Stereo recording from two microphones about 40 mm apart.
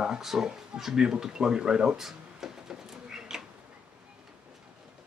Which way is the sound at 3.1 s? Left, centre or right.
Centre.